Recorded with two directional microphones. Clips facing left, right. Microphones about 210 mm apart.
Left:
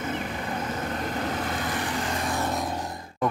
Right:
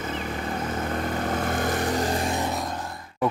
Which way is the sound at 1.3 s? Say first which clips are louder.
Right 4 dB; 50° right (ahead or behind).